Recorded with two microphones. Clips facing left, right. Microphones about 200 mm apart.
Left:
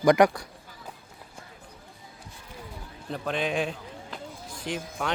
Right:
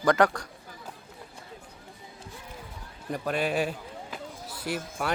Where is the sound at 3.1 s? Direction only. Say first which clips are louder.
Right 1 dB; 10° right (ahead or behind).